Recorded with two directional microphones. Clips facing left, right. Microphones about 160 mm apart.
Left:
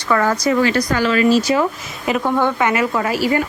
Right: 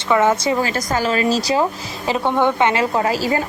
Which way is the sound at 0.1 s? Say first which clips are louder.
Right 1 dB; 20° right (ahead or behind).